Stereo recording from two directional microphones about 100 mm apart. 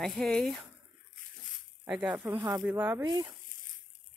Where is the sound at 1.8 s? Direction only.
15° right (ahead or behind).